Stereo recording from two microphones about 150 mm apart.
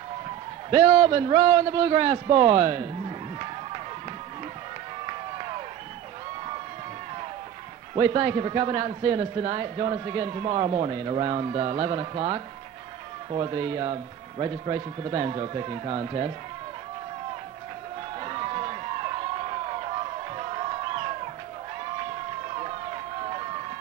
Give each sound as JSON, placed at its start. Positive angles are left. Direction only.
{"t": 0.7, "sound": "a man's voice", "side_deg": -35}
{"t": 5.0, "sound": "run", "side_deg": -35}
{"t": 7.9, "sound": "a man's voice", "side_deg": -35}
{"t": 18.2, "sound": "a sound", "side_deg": -35}
{"t": 22.5, "sound": "run", "side_deg": -35}